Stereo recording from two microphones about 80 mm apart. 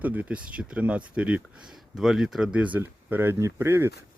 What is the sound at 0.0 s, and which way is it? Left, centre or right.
Speech, centre.